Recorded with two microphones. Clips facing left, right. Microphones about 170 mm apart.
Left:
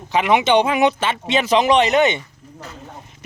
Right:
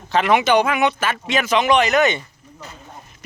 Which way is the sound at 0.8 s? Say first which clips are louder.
Left 3 dB; 40° left (ahead or behind).